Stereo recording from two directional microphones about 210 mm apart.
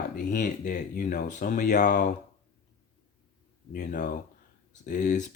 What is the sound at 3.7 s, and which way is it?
Speech, 40° left (ahead or behind).